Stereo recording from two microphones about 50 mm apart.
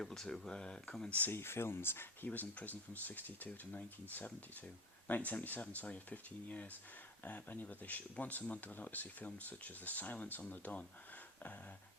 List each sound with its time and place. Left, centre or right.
0.0 s speech: centre
1.3 s speech: left
2.3 s speech: left